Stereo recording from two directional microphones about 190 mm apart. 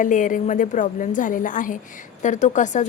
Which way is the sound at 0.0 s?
45° left (ahead or behind).